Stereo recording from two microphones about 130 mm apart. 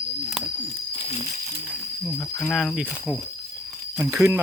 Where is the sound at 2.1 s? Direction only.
10° left (ahead or behind).